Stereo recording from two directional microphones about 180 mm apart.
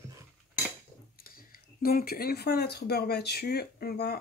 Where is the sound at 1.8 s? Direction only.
55° left (ahead or behind).